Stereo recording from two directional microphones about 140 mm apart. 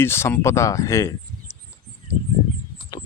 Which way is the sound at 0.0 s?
15° left (ahead or behind).